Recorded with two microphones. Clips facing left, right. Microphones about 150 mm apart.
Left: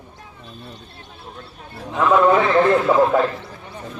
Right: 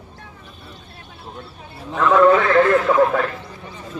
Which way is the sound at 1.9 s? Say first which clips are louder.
Right 1 dB; 15° left (ahead or behind).